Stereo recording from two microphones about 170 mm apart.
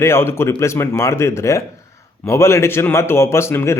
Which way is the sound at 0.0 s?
15° left (ahead or behind).